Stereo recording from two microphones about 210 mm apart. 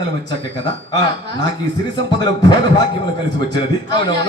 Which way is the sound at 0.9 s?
20° left (ahead or behind).